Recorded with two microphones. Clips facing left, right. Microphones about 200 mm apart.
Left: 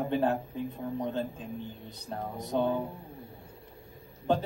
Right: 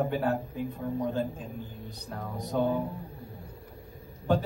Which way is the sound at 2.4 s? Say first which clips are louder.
Right 1 dB; 25° left (ahead or behind).